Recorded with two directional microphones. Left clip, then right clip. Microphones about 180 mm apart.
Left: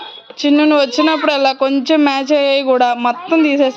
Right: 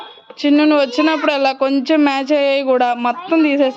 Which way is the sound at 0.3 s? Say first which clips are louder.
Left 1 dB; 5° right (ahead or behind).